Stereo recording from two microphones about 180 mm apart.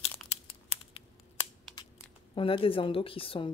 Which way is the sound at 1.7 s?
25° left (ahead or behind).